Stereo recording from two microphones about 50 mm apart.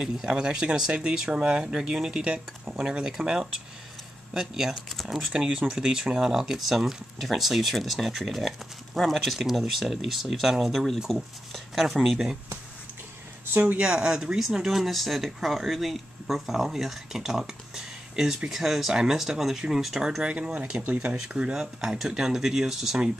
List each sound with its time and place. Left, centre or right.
0.0 s speech: centre
2.2 s speech: right; by 12.2 s centre
13.6 s speech: right; by 20.2 s centre
20.2 s speech: right